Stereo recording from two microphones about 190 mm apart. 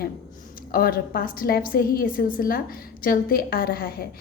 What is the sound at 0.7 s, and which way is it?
A woman's voice, 50° left (ahead or behind).